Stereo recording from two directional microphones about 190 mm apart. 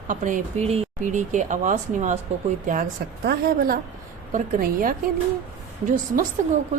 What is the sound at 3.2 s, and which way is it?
A woman's voice, 55° right (ahead or behind).